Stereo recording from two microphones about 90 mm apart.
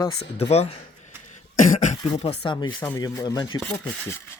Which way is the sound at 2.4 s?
60° left (ahead or behind).